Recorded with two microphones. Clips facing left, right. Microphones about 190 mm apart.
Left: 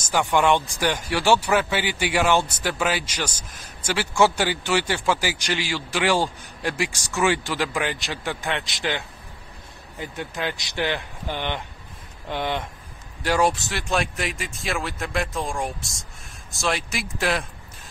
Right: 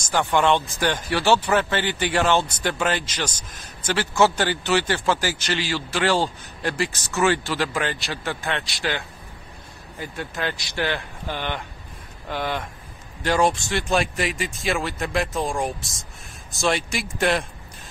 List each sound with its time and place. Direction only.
0.0 s speech: 10° left (ahead or behind)
13.2 s speech: 10° left (ahead or behind)